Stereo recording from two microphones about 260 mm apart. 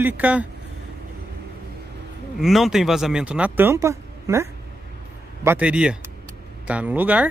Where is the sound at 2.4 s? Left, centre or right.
Centre.